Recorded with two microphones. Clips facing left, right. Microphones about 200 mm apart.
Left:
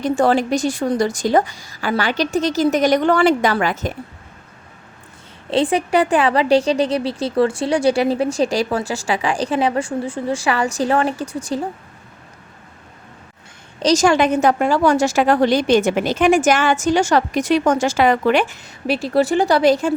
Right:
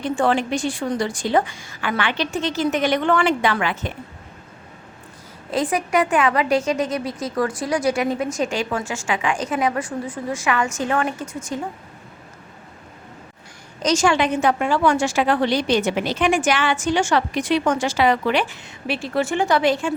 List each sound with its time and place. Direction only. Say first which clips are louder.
0.0 s a woman's voice: left 4 dB; 40° left (ahead or behind)
5.5 s a woman's voice: left 4 dB; 30° left (ahead or behind)
13.8 s a woman's voice: left 4 dB; 40° left (ahead or behind)